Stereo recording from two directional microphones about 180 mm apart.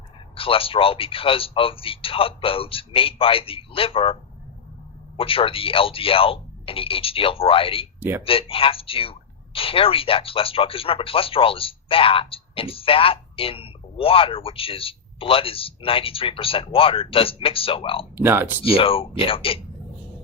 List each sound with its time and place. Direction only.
0.3 s speech: 30° left (ahead or behind)
5.2 s speech: 30° left (ahead or behind)
18.2 s speech: 10° right (ahead or behind)
18.6 s speech: 30° left (ahead or behind)